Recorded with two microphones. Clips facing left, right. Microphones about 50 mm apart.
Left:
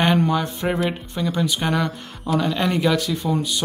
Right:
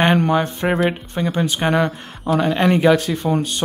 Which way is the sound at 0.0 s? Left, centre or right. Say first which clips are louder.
Right 3 dB; right.